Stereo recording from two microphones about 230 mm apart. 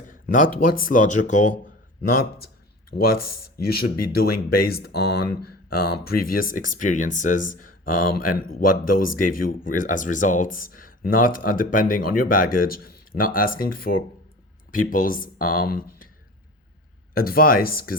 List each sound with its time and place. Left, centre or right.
0.1 s a sound: left
0.6 s speech: left
2.9 s speech: left
3.3 s speech: left
4.1 s speech: left
17.2 s speech: left